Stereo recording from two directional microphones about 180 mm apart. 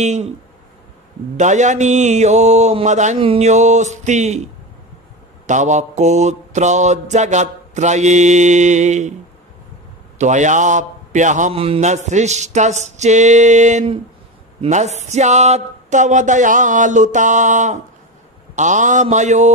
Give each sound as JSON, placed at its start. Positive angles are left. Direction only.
{"t": 0.0, "sound": "a man's voice", "side_deg": -40}
{"t": 1.3, "sound": "a man's voice", "side_deg": -40}
{"t": 5.5, "sound": "a man's voice", "side_deg": -40}
{"t": 10.1, "sound": "a man's voice", "side_deg": -40}